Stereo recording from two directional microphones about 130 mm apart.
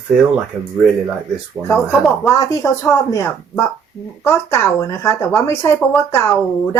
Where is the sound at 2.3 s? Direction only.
25° left (ahead or behind).